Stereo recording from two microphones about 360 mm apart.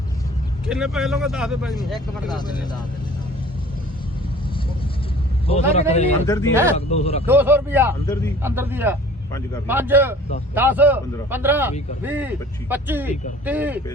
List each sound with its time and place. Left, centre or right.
0.7 s a man's voice: centre
5.5 s a man's voice: centre
7.3 s a man's voice: centre
8.0 s a man's voice: centre
8.4 s a man's voice: centre